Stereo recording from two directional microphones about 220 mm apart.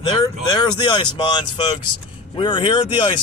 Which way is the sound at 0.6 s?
20° left (ahead or behind).